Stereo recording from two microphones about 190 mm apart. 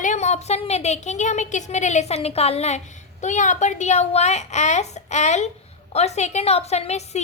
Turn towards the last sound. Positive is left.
turn(degrees=35)  # may be behind; listen again after turning